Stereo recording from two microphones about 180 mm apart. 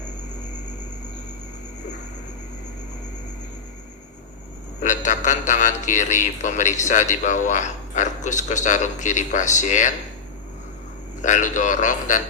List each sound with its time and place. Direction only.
4.8 s a man's voice: 40° left (ahead or behind)
11.2 s a man's voice: 45° left (ahead or behind)